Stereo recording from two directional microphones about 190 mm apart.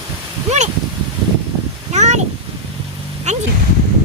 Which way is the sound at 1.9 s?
35° right (ahead or behind).